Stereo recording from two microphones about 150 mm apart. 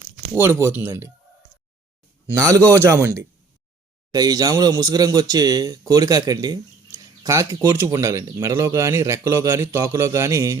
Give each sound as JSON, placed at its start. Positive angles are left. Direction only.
{"t": 0.3, "sound": "a man's voice", "side_deg": -15}
{"t": 2.2, "sound": "a man's voice", "side_deg": -20}